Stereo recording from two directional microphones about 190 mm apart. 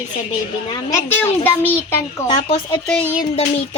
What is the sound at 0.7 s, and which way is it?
A woman's voice, 15° left (ahead or behind).